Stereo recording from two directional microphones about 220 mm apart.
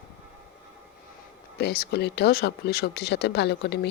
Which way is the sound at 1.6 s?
45° left (ahead or behind).